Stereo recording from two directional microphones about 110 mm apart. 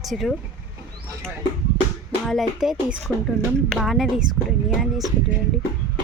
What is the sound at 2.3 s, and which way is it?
Speech, centre (ahead or behind).